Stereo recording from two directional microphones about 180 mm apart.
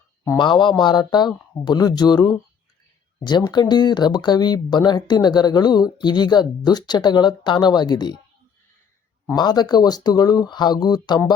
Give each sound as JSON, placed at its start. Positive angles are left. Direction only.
{"t": 0.3, "sound": "speech", "side_deg": 25}
{"t": 9.2, "sound": "speech", "side_deg": 25}